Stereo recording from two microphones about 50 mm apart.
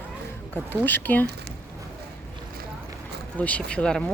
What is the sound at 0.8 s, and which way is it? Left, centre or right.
Speech, left.